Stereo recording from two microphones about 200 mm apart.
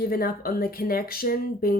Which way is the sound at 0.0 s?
45° left (ahead or behind).